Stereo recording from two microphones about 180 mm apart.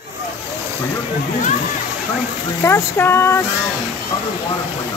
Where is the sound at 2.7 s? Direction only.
10° left (ahead or behind).